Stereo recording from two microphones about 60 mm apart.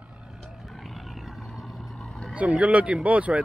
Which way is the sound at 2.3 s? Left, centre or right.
Right.